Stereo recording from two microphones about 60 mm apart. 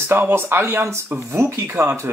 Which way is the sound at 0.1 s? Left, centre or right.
Right.